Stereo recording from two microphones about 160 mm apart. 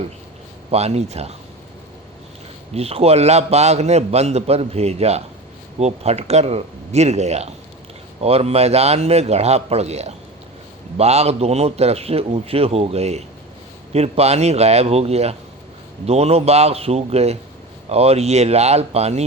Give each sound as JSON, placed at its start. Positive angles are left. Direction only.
{"t": 0.7, "sound": "a man's voice", "side_deg": -40}
{"t": 2.7, "sound": "a man's voice", "side_deg": -40}